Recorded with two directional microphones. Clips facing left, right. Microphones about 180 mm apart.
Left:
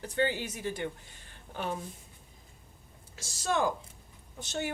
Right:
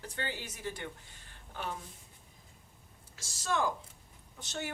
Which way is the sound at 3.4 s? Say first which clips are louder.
Left 3 dB; 15° left (ahead or behind).